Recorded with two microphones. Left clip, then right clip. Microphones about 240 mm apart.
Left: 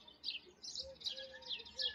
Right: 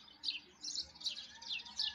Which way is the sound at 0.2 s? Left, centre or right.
Centre.